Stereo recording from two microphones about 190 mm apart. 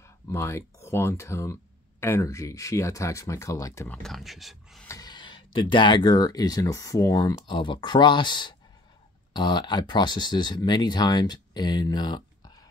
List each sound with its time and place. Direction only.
0.0 s speech: 15° left (ahead or behind)
4.8 s speech: 20° left (ahead or behind)